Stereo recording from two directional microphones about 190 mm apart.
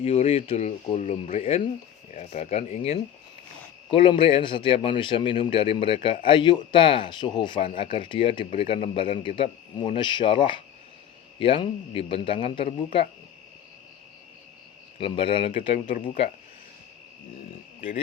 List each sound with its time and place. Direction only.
0.0 s a man's voice: 30° left (ahead or behind)
14.9 s a man's voice: 25° left (ahead or behind)
17.7 s speech: 30° left (ahead or behind)